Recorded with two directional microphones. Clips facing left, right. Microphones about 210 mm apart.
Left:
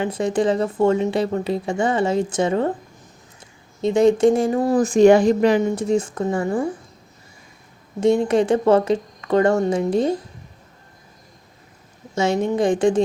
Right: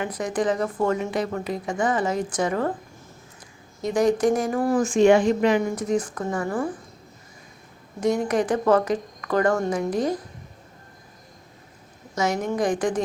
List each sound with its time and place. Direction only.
0.0 s speech: 25° left (ahead or behind)
3.8 s speech: 25° left (ahead or behind)
4.8 s a woman's voice: 40° left (ahead or behind)
8.0 s speech: 25° left (ahead or behind)
12.1 s speech: 25° left (ahead or behind)